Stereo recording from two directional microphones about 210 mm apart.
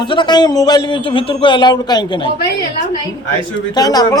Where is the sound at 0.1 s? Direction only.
20° left (ahead or behind).